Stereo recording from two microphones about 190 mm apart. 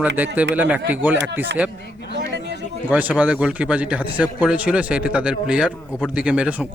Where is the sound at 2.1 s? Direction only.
65° right (ahead or behind).